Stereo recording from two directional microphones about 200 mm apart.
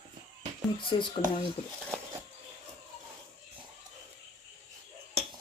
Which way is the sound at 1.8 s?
10° right (ahead or behind).